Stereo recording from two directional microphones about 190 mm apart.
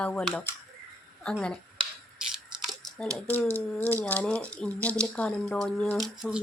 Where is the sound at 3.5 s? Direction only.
10° left (ahead or behind).